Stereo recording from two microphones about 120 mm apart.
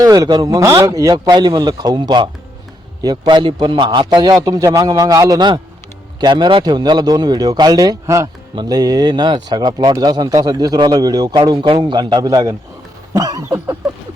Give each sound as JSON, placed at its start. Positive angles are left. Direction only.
{"t": 0.0, "sound": "a man's voice", "side_deg": -30}